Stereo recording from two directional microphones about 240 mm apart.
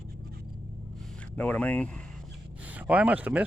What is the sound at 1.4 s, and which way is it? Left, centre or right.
Speech, centre.